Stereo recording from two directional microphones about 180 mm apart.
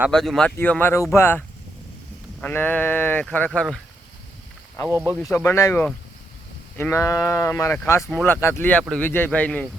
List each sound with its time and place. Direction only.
0.1 s speech: 5° left (ahead or behind)
4.9 s speech: 15° right (ahead or behind)
5.2 s speech: 15° left (ahead or behind)